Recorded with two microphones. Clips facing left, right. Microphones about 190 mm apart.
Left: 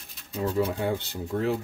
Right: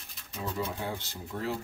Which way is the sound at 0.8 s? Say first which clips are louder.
Left 8 dB; 60° left (ahead or behind).